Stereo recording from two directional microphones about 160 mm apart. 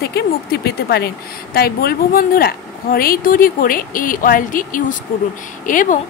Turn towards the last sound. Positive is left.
turn(degrees=55)  # may be behind; listen again after turning